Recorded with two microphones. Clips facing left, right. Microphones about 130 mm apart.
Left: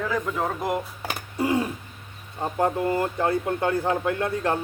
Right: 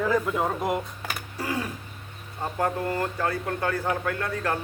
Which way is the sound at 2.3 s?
15° left (ahead or behind).